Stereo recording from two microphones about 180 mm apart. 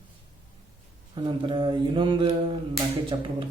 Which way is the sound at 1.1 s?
25° right (ahead or behind).